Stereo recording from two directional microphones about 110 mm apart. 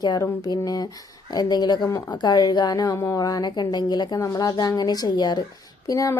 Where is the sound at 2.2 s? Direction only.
40° left (ahead or behind).